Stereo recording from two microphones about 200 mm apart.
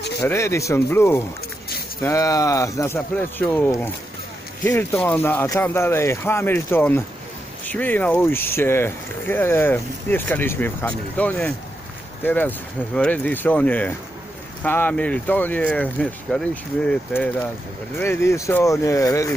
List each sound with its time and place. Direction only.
0.2 s speech: 15° left (ahead or behind)